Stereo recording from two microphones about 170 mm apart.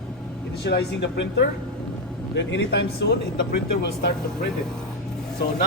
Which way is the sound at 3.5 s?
70° left (ahead or behind).